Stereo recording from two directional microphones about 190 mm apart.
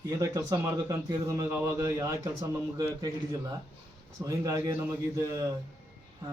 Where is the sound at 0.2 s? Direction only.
15° right (ahead or behind).